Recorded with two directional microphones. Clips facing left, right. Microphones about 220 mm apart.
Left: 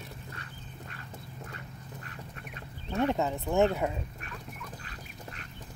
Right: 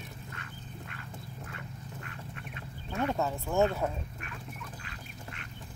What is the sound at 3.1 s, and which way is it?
Speech, 20° left (ahead or behind).